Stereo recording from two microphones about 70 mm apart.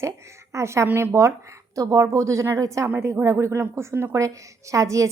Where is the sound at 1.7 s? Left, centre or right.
Right.